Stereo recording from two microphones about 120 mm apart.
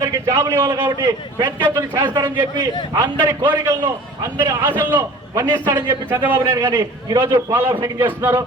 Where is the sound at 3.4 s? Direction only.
25° right (ahead or behind).